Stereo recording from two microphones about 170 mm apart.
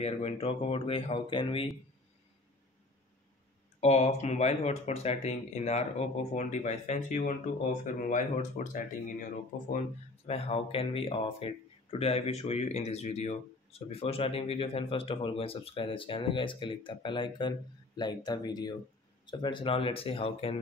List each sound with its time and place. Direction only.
0.0 s speech: 40° left (ahead or behind)
3.8 s speech: 40° left (ahead or behind)
10.2 s speech: 35° left (ahead or behind)